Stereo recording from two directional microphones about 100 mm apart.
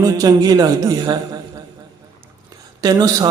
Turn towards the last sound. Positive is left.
turn(degrees=-40)  # may be behind; listen again after turning